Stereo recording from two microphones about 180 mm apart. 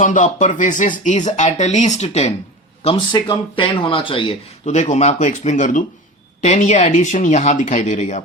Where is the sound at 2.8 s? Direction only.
25° left (ahead or behind).